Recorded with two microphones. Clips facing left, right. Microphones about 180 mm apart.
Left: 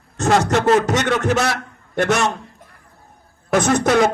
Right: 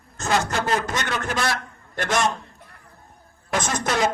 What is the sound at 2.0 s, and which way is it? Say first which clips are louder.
Speech: left 5 dB; 65° left (ahead or behind).